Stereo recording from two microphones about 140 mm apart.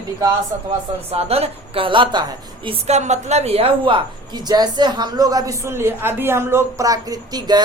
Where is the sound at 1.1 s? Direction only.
45° right (ahead or behind).